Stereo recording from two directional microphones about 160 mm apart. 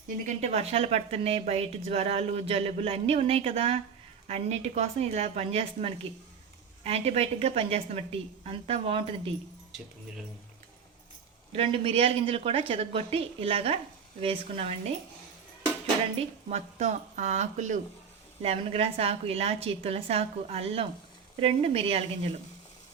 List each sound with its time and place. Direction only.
0.3 s speech: 45° right (ahead or behind)
11.5 s speech: 35° right (ahead or behind)
16.5 s speech: 45° right (ahead or behind)
18.4 s speech: 40° right (ahead or behind)